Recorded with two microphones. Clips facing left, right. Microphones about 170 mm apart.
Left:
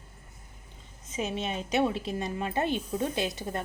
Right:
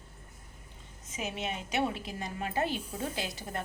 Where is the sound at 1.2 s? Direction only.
25° left (ahead or behind).